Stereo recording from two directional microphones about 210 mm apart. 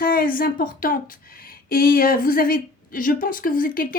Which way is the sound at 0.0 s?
45° left (ahead or behind).